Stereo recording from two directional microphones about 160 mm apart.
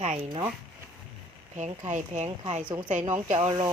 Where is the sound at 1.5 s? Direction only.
45° right (ahead or behind).